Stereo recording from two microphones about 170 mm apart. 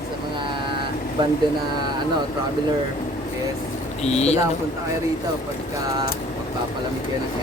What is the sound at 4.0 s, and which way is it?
Speech, 40° left (ahead or behind).